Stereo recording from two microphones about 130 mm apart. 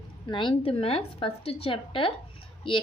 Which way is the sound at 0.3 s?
35° left (ahead or behind).